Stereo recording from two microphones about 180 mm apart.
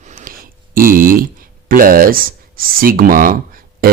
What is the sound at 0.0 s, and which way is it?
Speech, 45° right (ahead or behind).